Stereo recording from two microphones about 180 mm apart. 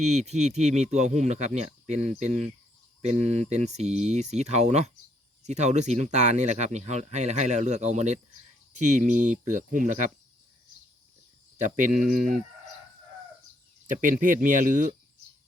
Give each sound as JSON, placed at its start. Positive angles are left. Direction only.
{"t": 0.0, "sound": "speech", "side_deg": -40}
{"t": 11.5, "sound": "speech", "side_deg": -45}
{"t": 13.8, "sound": "speech", "side_deg": -45}